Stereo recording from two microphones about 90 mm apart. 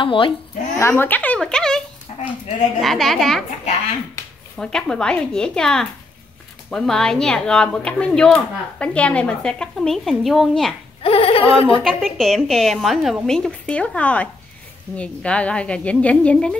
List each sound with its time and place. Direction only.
0.0 s speech: 70° left (ahead or behind)
0.7 s speech: 25° left (ahead or behind)
1.4 s speech: 5° left (ahead or behind)
2.8 s a woman's voice: centre (ahead or behind)
4.6 s speech: 10° left (ahead or behind)
11.0 s a sound: 90° left
11.8 s a woman's voice: 5° left (ahead or behind)